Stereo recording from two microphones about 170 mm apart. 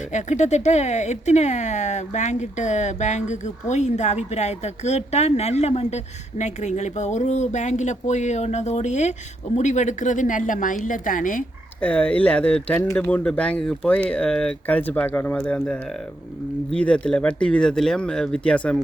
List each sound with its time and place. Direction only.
0.1 s speech: 45° left (ahead or behind)
11.8 s speech: 10° left (ahead or behind)